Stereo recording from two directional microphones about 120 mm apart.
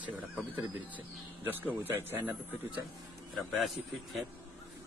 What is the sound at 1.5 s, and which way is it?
Speech, 15° right (ahead or behind).